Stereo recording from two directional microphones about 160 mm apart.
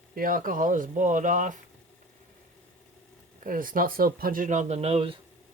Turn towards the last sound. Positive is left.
turn(degrees=-40)  # may be behind; listen again after turning